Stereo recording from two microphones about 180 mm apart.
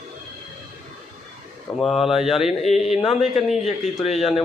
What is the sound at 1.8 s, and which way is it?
A man's voice, centre (ahead or behind).